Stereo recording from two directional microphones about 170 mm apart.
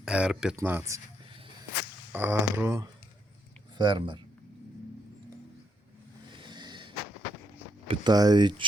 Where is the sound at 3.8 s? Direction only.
25° right (ahead or behind).